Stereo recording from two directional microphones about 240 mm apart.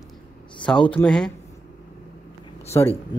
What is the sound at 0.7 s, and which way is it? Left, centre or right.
Speech, centre.